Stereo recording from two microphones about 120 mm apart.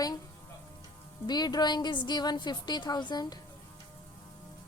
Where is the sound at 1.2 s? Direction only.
35° left (ahead or behind).